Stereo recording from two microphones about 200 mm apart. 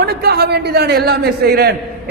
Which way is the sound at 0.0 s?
50° right (ahead or behind).